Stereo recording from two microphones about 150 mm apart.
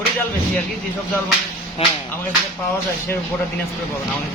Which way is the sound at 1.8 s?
40° left (ahead or behind).